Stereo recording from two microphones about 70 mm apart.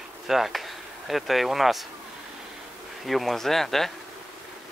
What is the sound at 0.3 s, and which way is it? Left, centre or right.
Speech, centre.